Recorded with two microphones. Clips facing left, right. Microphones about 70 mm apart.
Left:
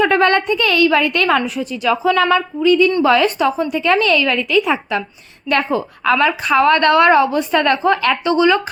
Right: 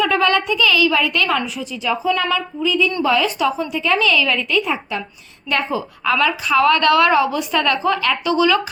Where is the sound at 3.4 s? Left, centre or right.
Left.